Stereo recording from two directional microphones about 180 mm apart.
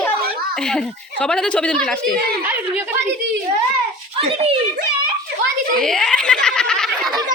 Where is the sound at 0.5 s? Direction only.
5° left (ahead or behind).